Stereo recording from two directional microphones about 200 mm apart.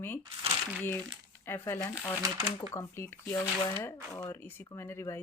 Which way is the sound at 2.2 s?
15° right (ahead or behind).